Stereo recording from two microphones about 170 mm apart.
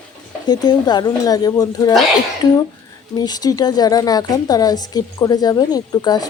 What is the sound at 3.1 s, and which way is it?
A woman's voice, 25° left (ahead or behind).